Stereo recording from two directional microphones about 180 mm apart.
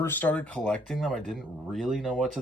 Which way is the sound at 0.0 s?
10° left (ahead or behind).